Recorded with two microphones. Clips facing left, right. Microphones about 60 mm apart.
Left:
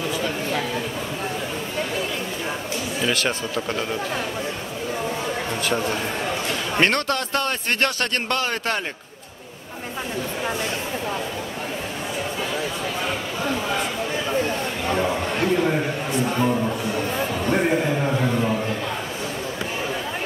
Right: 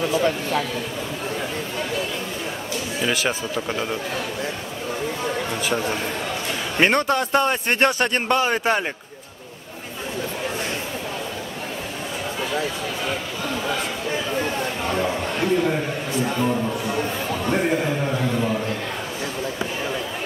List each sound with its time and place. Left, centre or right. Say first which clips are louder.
3.0 s a man's voice: even; centre
5.5 s a man's voice: left 2 dB; centre
6.8 s a man's voice: right 3 dB; centre
14.9 s a sound: left 3 dB; centre
16.3 s speech: left 1 dB; centre
17.5 s a sound: left 1 dB; centre